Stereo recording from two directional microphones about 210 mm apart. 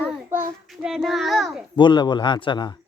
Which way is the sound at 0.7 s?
Centre (ahead or behind).